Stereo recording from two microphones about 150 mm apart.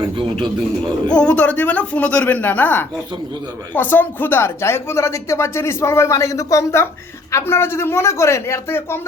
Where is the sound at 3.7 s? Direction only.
10° left (ahead or behind).